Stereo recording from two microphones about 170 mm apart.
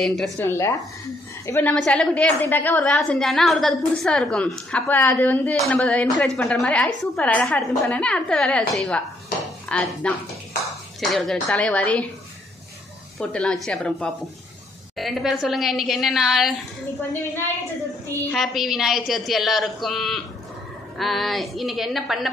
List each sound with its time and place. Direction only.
0.0 s a woman's voice: centre (ahead or behind)
0.5 s a woman's voice: 15° left (ahead or behind)
1.7 s a woman's voice: 5° left (ahead or behind)
13.2 s a woman's voice: 5° left (ahead or behind)
18.3 s a woman's voice: centre (ahead or behind)